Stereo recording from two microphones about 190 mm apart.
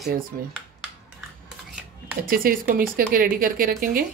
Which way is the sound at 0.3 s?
50° right (ahead or behind).